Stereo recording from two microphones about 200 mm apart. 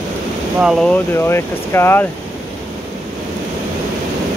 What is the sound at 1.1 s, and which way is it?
Speech, 10° left (ahead or behind).